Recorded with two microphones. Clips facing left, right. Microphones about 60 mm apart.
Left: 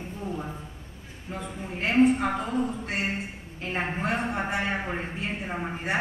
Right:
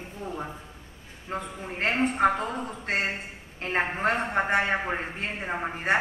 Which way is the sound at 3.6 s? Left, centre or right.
Right.